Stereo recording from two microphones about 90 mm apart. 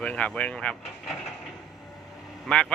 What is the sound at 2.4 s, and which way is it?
Speech, 10° left (ahead or behind).